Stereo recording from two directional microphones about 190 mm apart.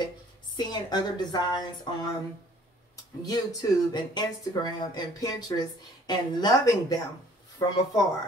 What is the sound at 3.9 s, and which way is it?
Speech, 20° left (ahead or behind).